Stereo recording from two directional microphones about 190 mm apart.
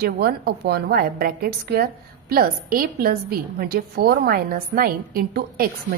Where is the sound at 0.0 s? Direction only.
55° right (ahead or behind).